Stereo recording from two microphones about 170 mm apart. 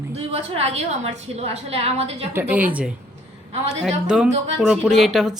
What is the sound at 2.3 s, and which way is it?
Speech, 10° right (ahead or behind).